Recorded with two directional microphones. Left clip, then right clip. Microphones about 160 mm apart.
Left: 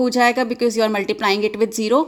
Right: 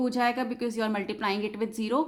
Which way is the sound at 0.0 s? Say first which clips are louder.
Left 11 dB; 35° left (ahead or behind).